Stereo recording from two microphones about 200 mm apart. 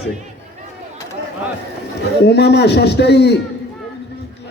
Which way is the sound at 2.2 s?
55° left (ahead or behind).